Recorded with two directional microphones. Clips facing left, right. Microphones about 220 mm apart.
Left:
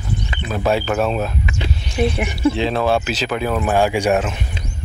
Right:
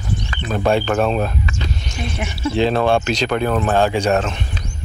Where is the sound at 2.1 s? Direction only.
60° left (ahead or behind).